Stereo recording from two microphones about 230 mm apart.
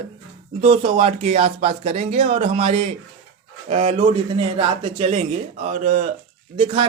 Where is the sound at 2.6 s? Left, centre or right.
Right.